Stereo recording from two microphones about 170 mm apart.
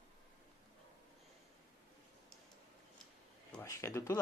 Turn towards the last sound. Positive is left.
turn(degrees=15)  # may be behind; listen again after turning